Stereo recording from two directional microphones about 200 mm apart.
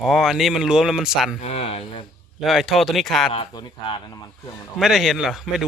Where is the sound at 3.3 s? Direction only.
25° left (ahead or behind).